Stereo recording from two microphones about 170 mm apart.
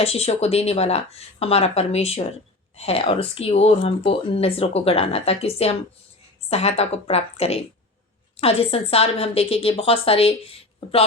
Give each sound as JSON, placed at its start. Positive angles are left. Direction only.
{"t": 0.0, "sound": "speech", "side_deg": 35}